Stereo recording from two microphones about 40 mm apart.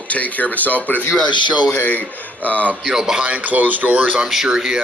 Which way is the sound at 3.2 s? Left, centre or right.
Right.